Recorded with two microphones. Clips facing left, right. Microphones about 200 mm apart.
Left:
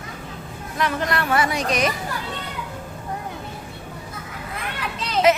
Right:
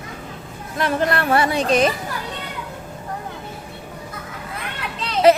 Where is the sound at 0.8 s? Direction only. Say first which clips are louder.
Right 3 dB; 30° right (ahead or behind).